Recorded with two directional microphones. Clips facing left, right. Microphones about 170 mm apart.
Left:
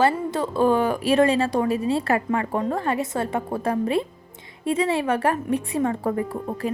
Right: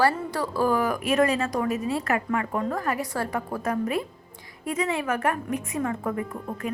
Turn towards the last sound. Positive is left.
turn(degrees=35)  # may be behind; listen again after turning